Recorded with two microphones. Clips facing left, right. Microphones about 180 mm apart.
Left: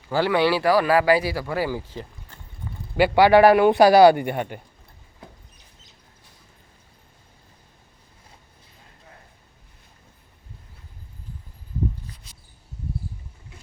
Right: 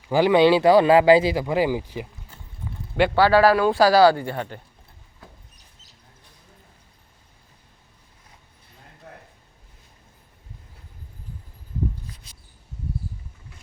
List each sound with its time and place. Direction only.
0.1 s speech: 15° right (ahead or behind)
3.2 s a man's voice: 20° left (ahead or behind)
9.1 s a sound: 65° right (ahead or behind)